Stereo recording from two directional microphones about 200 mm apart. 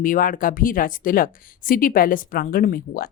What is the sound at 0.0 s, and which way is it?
Speech, 45° left (ahead or behind).